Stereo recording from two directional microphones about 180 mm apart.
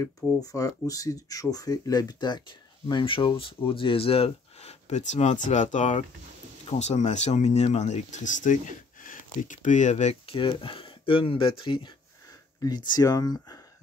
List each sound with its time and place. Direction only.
0.0 s speech: 15° left (ahead or behind)